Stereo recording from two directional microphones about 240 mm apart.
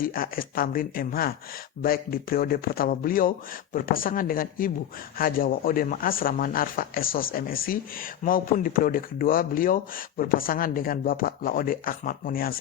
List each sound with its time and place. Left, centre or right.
0.0 s speech: left